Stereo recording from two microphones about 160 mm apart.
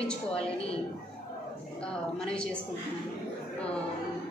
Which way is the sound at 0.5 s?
35° left (ahead or behind).